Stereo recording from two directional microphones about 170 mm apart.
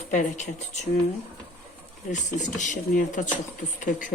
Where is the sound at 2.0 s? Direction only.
50° left (ahead or behind).